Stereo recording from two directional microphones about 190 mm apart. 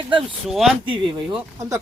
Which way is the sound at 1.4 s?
15° right (ahead or behind).